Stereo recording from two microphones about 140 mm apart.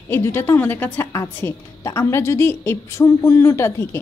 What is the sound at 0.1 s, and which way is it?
A woman's voice, 15° left (ahead or behind).